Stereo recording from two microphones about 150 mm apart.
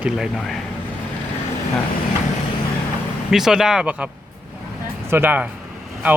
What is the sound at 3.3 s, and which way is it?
Speech, 5° right (ahead or behind).